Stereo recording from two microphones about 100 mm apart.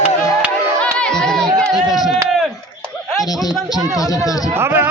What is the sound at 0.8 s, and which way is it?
Crowd, 10° left (ahead or behind).